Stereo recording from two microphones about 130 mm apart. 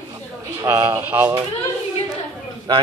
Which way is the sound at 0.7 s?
35° right (ahead or behind).